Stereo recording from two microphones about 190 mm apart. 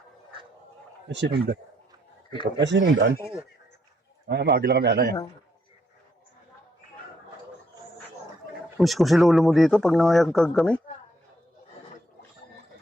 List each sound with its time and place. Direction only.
1.0 s speech: 65° right (ahead or behind)
2.6 s speech: 70° right (ahead or behind)
4.3 s a man's voice: 60° right (ahead or behind)
8.8 s speech: centre (ahead or behind)